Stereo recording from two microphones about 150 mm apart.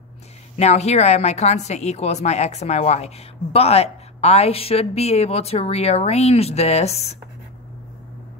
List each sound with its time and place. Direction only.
0.6 s speech: 45° left (ahead or behind)